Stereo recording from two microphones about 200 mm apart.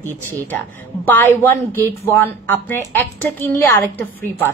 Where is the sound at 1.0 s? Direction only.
10° left (ahead or behind).